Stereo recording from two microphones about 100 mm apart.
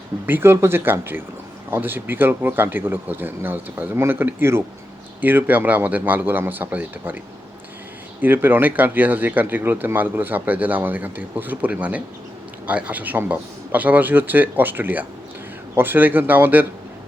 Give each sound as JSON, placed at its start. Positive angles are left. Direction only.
{"t": 0.3, "sound": "speech", "side_deg": -25}
{"t": 8.2, "sound": "speech", "side_deg": -20}